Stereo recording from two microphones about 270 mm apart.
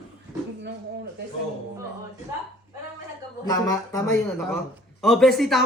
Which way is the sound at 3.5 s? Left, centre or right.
Centre.